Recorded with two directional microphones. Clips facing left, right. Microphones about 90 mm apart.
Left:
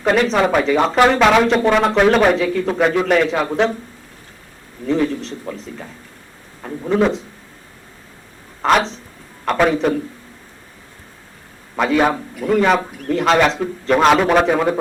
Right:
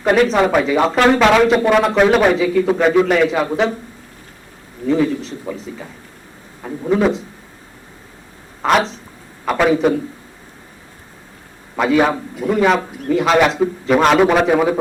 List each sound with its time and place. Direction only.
0.0 s a man's voice: 5° right (ahead or behind)
4.9 s a man's voice: 5° right (ahead or behind)
8.6 s a man's voice: centre (ahead or behind)
11.8 s a man's voice: centre (ahead or behind)
12.4 s a man's voice: 15° right (ahead or behind)
13.1 s a man's voice: 5° right (ahead or behind)